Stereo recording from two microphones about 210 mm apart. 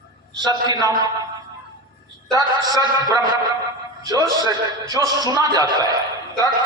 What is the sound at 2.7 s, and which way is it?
Speech, 20° right (ahead or behind).